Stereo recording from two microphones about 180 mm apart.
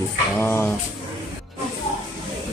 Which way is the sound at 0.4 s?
10° left (ahead or behind).